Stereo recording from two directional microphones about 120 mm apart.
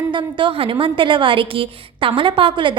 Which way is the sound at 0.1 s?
45° right (ahead or behind).